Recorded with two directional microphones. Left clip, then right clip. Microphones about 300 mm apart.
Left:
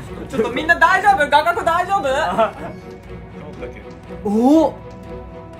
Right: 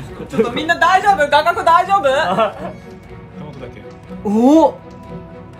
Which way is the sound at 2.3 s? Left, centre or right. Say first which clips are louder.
Right 2 dB; right.